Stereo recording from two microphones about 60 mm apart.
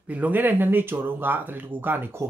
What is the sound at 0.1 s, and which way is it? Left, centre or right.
Speech, right.